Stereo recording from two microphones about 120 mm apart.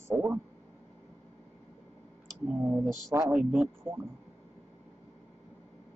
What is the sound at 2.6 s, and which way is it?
Speech, 25° right (ahead or behind).